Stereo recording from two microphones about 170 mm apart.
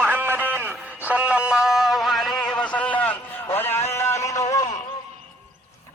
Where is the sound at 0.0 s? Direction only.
10° right (ahead or behind); by 4.6 s 20° left (ahead or behind).